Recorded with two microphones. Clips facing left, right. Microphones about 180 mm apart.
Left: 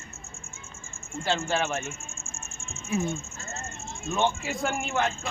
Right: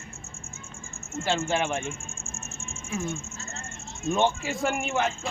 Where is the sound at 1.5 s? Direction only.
10° right (ahead or behind).